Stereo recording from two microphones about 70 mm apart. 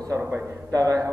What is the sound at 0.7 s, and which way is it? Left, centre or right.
Speech, right.